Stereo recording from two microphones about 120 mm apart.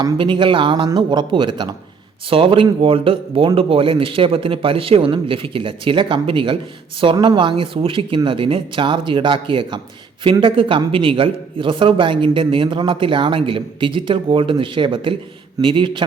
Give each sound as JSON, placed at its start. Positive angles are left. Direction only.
{"t": 0.0, "sound": "a man's voice", "side_deg": -40}